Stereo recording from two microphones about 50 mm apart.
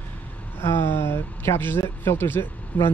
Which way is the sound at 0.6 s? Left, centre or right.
Left.